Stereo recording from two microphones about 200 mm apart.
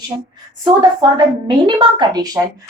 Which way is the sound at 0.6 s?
20° right (ahead or behind).